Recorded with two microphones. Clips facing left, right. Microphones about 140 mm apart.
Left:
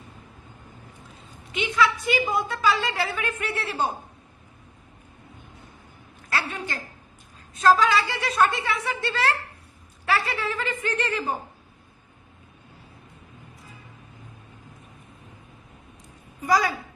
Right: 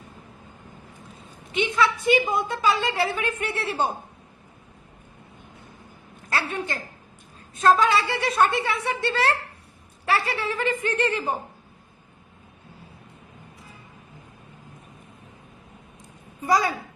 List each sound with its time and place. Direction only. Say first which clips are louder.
1.5 s a woman's voice: right 1 dB; 25° right (ahead or behind)
6.3 s a woman's voice: right 2 dB; 25° right (ahead or behind)
16.4 s a woman's voice: even; 25° right (ahead or behind)